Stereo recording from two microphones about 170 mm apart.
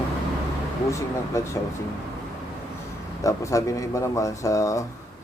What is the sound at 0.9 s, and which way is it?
Speech, 15° left (ahead or behind).